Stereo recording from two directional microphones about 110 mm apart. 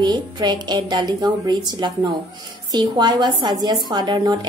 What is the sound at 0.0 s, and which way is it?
A woman's voice, 40° right (ahead or behind).